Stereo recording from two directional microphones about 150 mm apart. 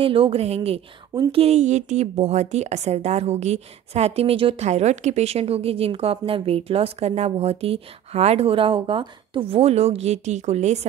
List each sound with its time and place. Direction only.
0.0 s a woman's voice: 35° right (ahead or behind)